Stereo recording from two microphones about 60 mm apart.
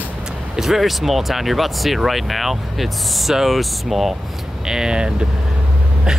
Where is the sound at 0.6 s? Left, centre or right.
Centre.